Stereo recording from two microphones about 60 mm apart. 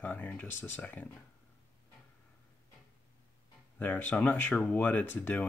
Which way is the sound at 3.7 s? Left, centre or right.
Left.